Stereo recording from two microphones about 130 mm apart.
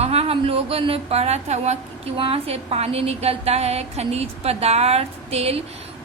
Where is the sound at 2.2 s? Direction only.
45° right (ahead or behind).